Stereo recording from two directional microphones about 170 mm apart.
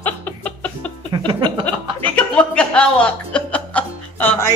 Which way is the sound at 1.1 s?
30° right (ahead or behind).